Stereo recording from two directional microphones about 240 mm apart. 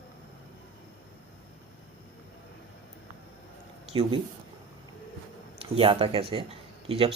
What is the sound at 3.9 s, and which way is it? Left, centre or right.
Speech, centre.